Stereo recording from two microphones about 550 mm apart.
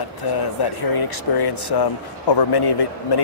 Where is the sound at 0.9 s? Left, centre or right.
Left.